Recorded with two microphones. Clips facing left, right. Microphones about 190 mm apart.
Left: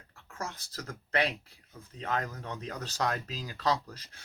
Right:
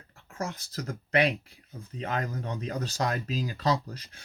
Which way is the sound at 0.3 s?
20° right (ahead or behind).